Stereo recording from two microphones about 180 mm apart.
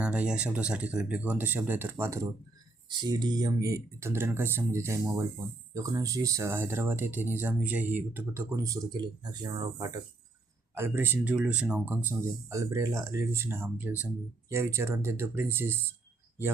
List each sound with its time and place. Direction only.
0.0 s speech: 5° right (ahead or behind)
3.0 s speech: 25° right (ahead or behind)